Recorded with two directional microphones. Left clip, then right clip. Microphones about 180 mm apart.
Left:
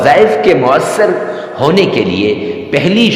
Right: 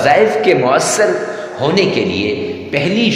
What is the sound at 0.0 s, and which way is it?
A man's voice, 20° left (ahead or behind).